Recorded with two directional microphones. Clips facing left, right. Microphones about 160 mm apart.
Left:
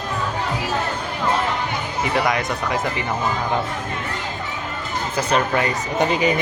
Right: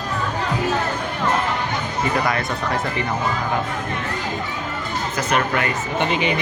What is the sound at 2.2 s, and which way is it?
Speech, 20° left (ahead or behind).